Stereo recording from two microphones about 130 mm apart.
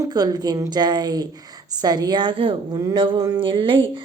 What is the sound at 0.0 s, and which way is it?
Speech, 30° right (ahead or behind).